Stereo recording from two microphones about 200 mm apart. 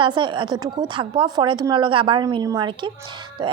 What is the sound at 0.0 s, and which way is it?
A woman's voice, 25° right (ahead or behind).